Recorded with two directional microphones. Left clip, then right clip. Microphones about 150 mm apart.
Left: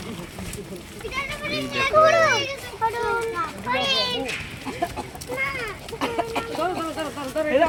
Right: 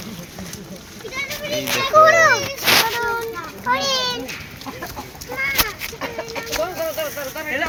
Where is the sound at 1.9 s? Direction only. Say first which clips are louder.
Right 5 dB; 10° right (ahead or behind).